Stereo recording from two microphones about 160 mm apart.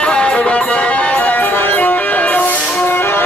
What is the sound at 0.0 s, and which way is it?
Music, 5° left (ahead or behind).